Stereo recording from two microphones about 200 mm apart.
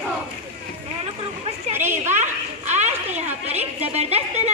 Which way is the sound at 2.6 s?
35° right (ahead or behind).